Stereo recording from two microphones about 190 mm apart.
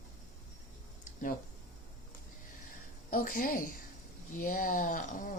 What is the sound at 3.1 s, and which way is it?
Speech, 50° left (ahead or behind).